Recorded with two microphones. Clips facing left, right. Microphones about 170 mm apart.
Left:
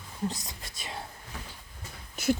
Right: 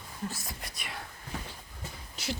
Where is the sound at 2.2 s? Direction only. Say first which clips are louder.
Left 10 dB; 50° left (ahead or behind).